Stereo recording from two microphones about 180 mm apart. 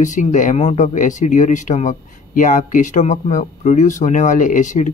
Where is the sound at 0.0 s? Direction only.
45° left (ahead or behind).